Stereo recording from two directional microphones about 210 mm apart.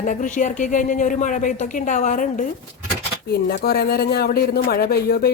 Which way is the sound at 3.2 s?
50° left (ahead or behind).